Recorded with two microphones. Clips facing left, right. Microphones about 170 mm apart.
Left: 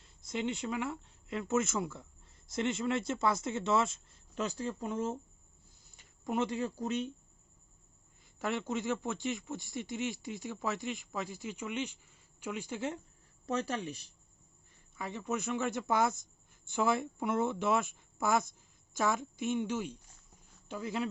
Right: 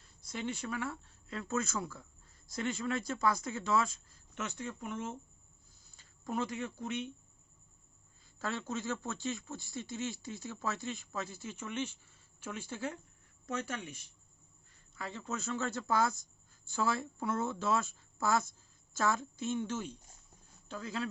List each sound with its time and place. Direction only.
0.0 s speech: 20° left (ahead or behind)
6.0 s speech: 20° left (ahead or behind); by 7.1 s 35° left (ahead or behind)
8.4 s speech: 20° left (ahead or behind)
13.4 s speech: 35° left (ahead or behind)
14.9 s speech: 20° left (ahead or behind)